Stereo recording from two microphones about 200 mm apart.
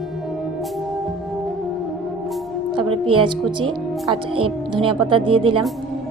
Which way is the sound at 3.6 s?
25° right (ahead or behind).